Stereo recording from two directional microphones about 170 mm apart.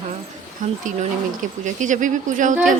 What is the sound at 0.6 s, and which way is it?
Speech, 55° right (ahead or behind).